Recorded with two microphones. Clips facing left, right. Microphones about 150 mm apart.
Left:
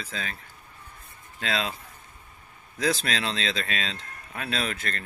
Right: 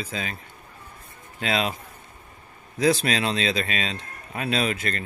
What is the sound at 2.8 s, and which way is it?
A man's voice, 15° right (ahead or behind).